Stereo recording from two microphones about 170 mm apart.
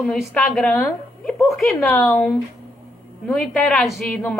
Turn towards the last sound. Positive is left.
turn(degrees=0)  # may be behind; listen again after turning